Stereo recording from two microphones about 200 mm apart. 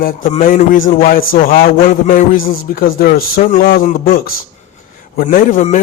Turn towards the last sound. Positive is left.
turn(degrees=35)  # may be behind; listen again after turning